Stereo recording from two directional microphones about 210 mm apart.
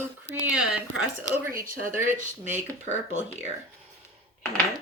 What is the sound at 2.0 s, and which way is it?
Speech, 35° right (ahead or behind).